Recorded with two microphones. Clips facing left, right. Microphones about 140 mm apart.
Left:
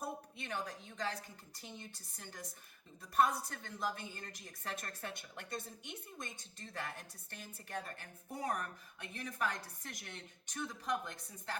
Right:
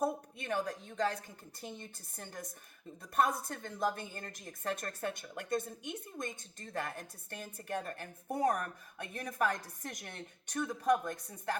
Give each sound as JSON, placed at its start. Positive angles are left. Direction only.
{"t": 0.0, "sound": "a woman's voice", "side_deg": -50}